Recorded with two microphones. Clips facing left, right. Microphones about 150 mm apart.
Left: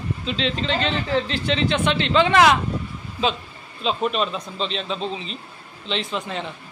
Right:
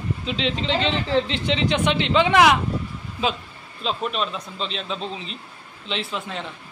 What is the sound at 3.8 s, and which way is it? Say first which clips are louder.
Speech: left 3 dB; centre (ahead or behind).